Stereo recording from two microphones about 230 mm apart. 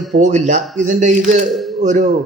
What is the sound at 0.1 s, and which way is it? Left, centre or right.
Speech, right.